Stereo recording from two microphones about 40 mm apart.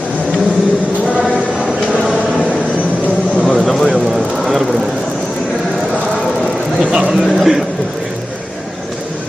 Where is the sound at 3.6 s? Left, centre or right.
Centre.